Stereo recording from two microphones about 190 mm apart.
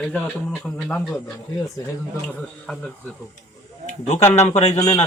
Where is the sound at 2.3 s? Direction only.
5° left (ahead or behind).